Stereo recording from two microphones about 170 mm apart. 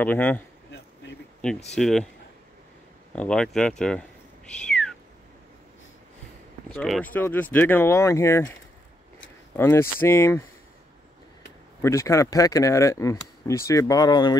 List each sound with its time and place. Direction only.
0.0 s speech: 10° left (ahead or behind)
1.8 s speech: centre (ahead or behind)
3.1 s speech: 5° left (ahead or behind)
4.6 s cat: 5° left (ahead or behind)
6.8 s speech: 5° left (ahead or behind)
9.6 s speech: 15° left (ahead or behind)
11.8 s speech: 15° left (ahead or behind)